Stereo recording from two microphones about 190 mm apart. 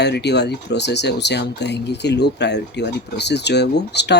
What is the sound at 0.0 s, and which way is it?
Speech, 60° left (ahead or behind).